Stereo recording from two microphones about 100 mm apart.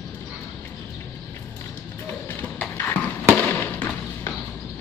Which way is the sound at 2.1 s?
15° left (ahead or behind).